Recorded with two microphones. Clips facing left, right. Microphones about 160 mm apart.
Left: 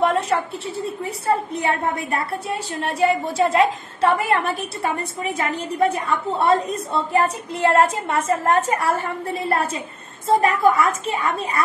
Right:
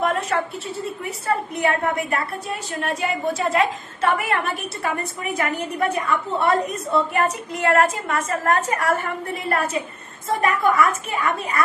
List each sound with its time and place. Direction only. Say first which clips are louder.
0.0 s a woman's voice: left 2 dB; 30° left (ahead or behind)